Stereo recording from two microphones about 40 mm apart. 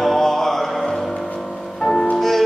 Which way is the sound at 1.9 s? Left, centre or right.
Left.